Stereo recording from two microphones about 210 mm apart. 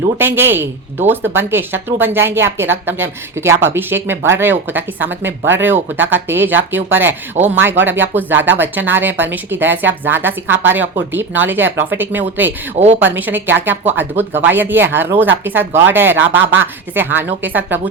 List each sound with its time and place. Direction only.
0.2 s a woman's voice: 10° right (ahead or behind)